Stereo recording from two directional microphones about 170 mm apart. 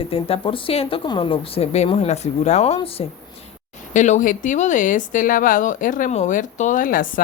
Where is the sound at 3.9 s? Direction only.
45° left (ahead or behind).